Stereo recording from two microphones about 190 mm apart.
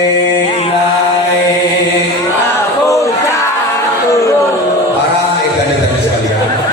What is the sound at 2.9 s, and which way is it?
Battle cry, 15° left (ahead or behind).